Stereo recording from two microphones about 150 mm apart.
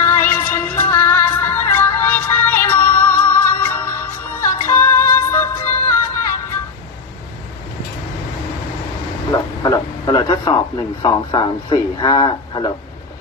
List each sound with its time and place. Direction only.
0.0 s music: 15° left (ahead or behind)
9.3 s a sound: 25° left (ahead or behind)
11.0 s a man's voice: 30° left (ahead or behind)